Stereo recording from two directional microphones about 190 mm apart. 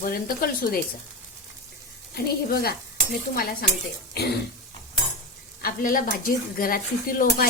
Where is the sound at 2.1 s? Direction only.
50° left (ahead or behind).